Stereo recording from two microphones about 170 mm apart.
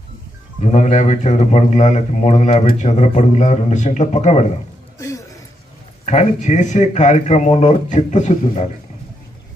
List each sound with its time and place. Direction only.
0.6 s speech: 40° left (ahead or behind)
4.9 s music: 20° left (ahead or behind)
6.0 s speech: 45° left (ahead or behind)